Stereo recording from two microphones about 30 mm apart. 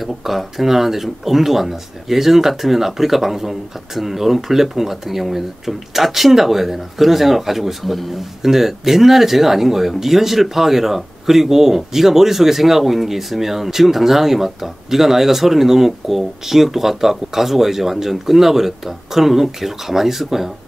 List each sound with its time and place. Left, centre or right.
0.0 s speech: centre
8.4 s speech: centre